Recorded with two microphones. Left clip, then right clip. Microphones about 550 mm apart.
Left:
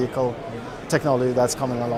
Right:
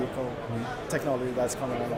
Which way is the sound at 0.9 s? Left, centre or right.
Left.